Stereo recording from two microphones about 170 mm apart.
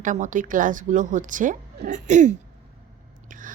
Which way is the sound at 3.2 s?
50° right (ahead or behind).